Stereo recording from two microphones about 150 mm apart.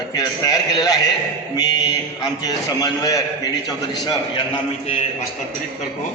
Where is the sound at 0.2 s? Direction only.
25° left (ahead or behind).